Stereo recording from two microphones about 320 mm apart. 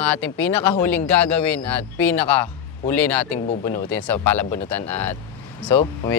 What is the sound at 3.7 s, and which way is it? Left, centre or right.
Speech, left.